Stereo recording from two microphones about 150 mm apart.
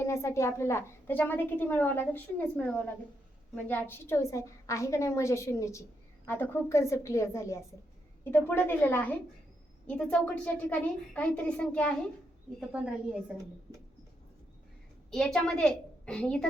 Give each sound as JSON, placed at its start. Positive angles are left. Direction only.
{"t": 0.0, "sound": "a woman's voice", "side_deg": 20}
{"t": 12.5, "sound": "speech", "side_deg": -5}
{"t": 13.3, "sound": "speech", "side_deg": -25}
{"t": 15.1, "sound": "a woman's voice", "side_deg": 5}